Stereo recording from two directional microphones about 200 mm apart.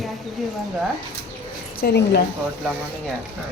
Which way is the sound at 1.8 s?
55° left (ahead or behind).